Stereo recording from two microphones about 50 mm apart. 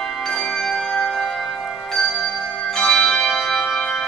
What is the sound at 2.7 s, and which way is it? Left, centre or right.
Bell, centre.